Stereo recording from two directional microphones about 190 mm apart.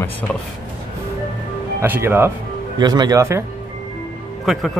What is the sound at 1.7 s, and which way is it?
Speech, 10° right (ahead or behind).